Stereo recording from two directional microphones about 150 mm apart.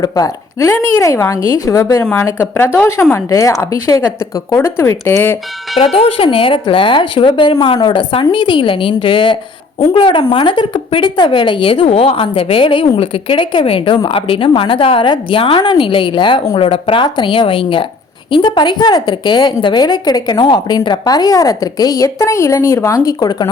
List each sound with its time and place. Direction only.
0.0 s a woman's voice: 25° left (ahead or behind)
5.8 s a woman's voice: 40° left (ahead or behind)